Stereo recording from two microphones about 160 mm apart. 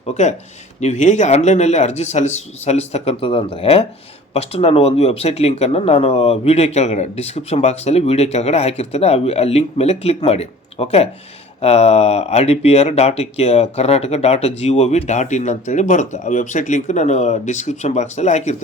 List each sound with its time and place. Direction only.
0.0 s speech: 45° left (ahead or behind)